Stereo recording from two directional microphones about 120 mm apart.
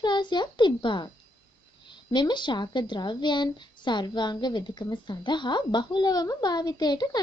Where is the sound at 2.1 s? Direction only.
40° left (ahead or behind).